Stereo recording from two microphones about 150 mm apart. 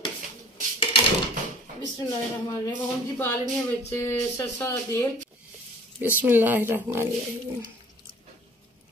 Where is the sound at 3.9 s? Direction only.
20° left (ahead or behind).